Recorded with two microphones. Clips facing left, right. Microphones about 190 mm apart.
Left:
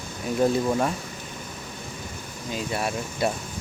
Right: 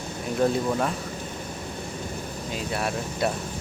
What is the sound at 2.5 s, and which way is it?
Speech, centre (ahead or behind).